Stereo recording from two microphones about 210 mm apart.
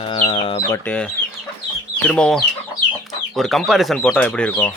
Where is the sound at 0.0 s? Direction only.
25° left (ahead or behind).